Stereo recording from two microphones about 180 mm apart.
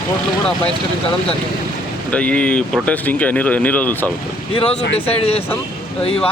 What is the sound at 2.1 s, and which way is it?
Speech, 5° left (ahead or behind).